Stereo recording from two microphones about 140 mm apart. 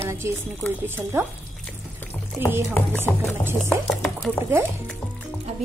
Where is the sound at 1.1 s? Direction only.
15° right (ahead or behind).